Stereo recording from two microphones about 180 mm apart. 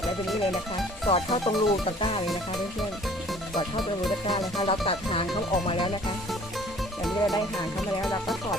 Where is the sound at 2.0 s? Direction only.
30° left (ahead or behind).